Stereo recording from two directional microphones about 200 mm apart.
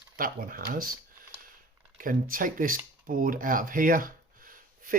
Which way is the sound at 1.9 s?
45° right (ahead or behind).